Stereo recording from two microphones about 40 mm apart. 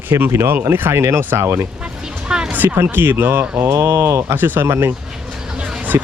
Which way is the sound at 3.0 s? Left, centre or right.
Right.